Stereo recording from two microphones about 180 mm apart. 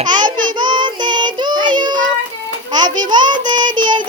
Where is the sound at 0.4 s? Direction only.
25° right (ahead or behind).